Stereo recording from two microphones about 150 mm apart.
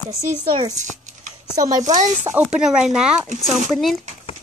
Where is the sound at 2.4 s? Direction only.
5° right (ahead or behind).